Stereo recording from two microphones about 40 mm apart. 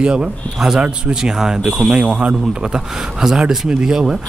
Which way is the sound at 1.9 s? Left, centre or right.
Right.